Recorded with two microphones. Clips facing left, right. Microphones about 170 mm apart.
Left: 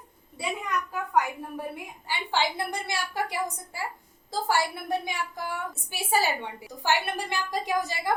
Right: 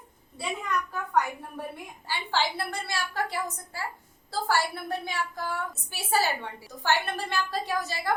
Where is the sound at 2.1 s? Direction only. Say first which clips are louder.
Left 1 dB; 15° left (ahead or behind).